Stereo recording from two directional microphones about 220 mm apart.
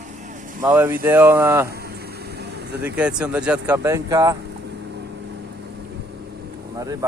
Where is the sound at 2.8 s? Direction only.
5° right (ahead or behind).